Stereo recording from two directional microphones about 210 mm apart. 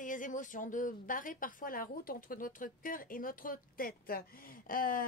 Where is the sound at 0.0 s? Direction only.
40° left (ahead or behind).